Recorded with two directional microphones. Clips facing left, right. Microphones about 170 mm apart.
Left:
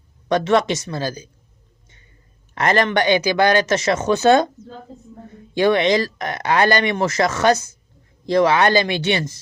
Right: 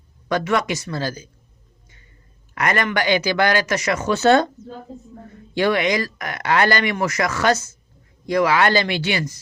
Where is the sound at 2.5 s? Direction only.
30° left (ahead or behind).